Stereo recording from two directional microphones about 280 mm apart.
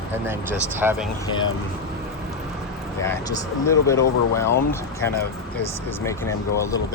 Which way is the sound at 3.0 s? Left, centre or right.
Centre.